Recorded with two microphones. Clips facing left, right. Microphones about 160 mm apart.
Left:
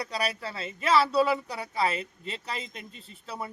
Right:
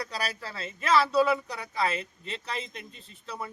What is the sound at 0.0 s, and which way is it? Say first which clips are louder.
Speech: left 3 dB; centre (ahead or behind).